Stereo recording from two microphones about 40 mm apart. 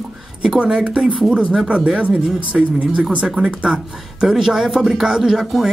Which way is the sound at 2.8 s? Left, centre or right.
Right.